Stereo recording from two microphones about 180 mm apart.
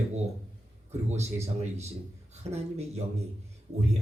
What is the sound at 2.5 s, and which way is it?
Speech, 35° right (ahead or behind).